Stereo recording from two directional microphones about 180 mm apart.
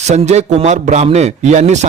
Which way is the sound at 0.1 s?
40° right (ahead or behind).